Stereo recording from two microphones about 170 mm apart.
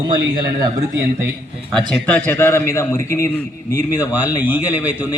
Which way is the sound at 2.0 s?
10° left (ahead or behind).